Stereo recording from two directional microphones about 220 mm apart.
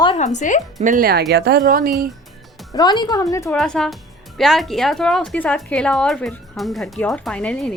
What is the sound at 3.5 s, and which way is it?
Speech, centre (ahead or behind).